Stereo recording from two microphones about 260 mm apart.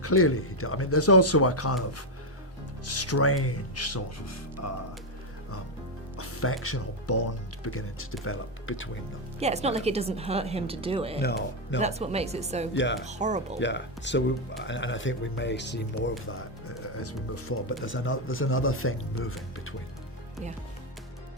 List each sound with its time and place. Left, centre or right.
0.0 s speech: left
2.8 s speech: left
6.1 s speech: left
9.4 s a woman's voice: right
11.2 s speech: left
11.8 s a woman's voice: right
12.7 s speech: left
13.0 s a woman's voice: right
13.6 s speech: left
17.0 s speech: left
17.8 s speech: left